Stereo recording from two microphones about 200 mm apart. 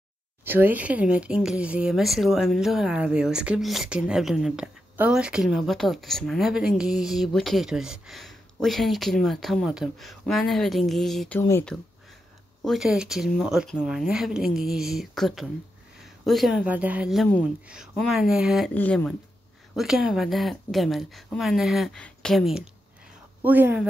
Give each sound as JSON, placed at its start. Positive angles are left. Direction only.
{"t": 0.5, "sound": "speech", "side_deg": -10}
{"t": 12.6, "sound": "a woman's voice", "side_deg": 0}